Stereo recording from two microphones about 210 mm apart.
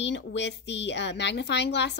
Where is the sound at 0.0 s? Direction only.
60° left (ahead or behind).